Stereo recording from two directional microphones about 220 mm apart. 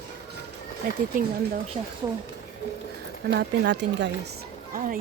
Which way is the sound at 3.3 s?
55° right (ahead or behind).